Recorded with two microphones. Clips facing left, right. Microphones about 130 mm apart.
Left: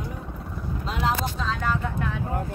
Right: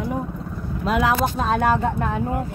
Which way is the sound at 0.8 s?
60° right (ahead or behind).